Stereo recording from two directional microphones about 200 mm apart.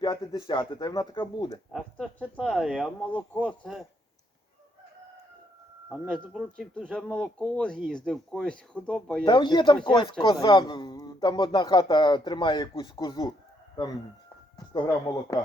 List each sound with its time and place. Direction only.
0.0 s speech: 20° left (ahead or behind)
1.7 s speech: 5° left (ahead or behind)
5.9 s speech: centre (ahead or behind)
9.2 s speech: 25° left (ahead or behind)